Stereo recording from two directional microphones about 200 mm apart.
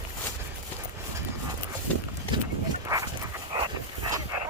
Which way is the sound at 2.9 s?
15° right (ahead or behind).